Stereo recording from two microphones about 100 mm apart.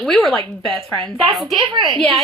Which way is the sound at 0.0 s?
5° left (ahead or behind).